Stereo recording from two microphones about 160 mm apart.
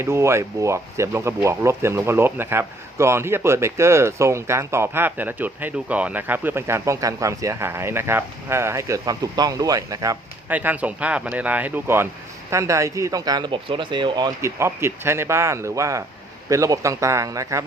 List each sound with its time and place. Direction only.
0.0 s speech: 15° right (ahead or behind)
10.5 s a man's voice: 10° right (ahead or behind)